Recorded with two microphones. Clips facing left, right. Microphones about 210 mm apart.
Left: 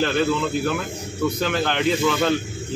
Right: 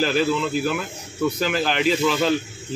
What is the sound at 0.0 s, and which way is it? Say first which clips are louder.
A man's voice: even; 5° right (ahead or behind).